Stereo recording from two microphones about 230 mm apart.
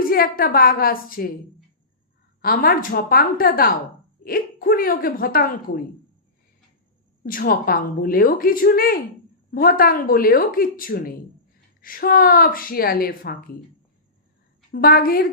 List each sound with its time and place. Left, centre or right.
0.0 s a woman's voice: left
2.4 s a woman's voice: left
7.3 s a woman's voice: left
14.7 s a woman's voice: left